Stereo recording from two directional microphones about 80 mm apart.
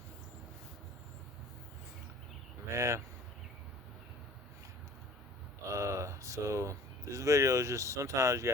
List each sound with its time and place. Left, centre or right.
2.7 s speech: right
5.7 s speech: right